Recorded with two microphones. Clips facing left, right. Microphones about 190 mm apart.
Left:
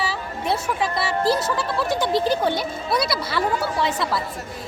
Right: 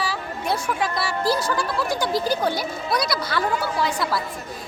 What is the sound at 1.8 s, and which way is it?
Speech, 25° left (ahead or behind).